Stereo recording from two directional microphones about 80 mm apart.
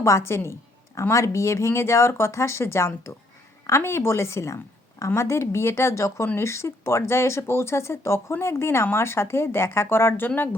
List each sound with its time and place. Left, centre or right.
0.0 s speech: left